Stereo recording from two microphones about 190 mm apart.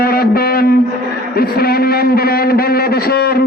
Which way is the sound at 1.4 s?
55° left (ahead or behind).